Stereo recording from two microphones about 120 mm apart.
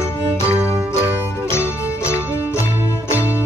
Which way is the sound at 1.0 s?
20° left (ahead or behind).